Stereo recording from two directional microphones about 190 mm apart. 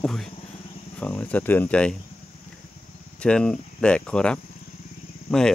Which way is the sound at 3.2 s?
5° left (ahead or behind).